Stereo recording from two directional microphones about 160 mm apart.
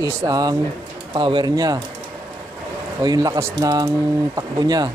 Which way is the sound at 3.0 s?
25° right (ahead or behind).